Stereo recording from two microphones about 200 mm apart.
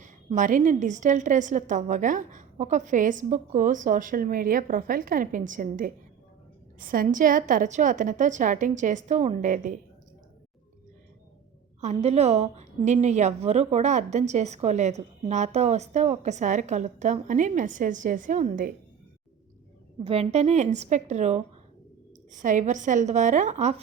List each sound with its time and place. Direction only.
0.0 s a woman's voice: 40° right (ahead or behind)
11.8 s a woman's voice: 35° right (ahead or behind)
20.1 s a woman's voice: 30° right (ahead or behind)